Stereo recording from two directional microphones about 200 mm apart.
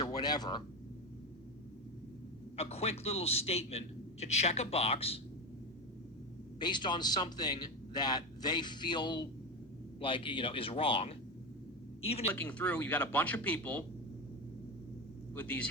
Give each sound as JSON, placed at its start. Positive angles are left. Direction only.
{"t": 0.0, "sound": "speech", "side_deg": 20}
{"t": 2.6, "sound": "a man's voice", "side_deg": 30}
{"t": 6.6, "sound": "a man's voice", "side_deg": 25}
{"t": 12.3, "sound": "speech", "side_deg": 5}
{"t": 15.4, "sound": "speech", "side_deg": 5}